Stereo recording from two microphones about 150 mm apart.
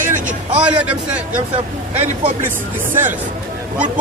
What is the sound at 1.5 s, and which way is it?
Speech, 40° right (ahead or behind).